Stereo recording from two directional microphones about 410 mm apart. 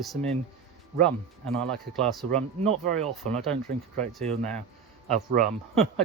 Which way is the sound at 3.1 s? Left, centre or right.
Centre.